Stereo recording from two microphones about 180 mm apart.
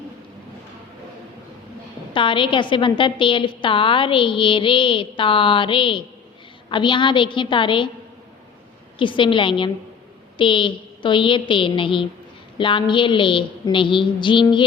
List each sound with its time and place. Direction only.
2.1 s a woman's voice: 30° left (ahead or behind)
9.0 s a woman's voice: 25° left (ahead or behind)